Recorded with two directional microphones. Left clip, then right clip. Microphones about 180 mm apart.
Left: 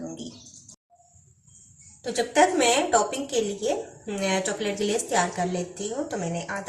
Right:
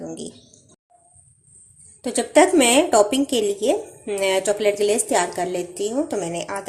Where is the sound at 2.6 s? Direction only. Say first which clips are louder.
Right 6 dB; 45° right (ahead or behind).